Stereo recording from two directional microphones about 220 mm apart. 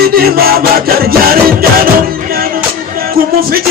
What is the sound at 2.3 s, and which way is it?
Music, 40° right (ahead or behind).